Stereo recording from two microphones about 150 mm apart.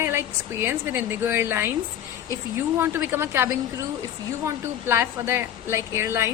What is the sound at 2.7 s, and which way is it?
Speech, 15° right (ahead or behind).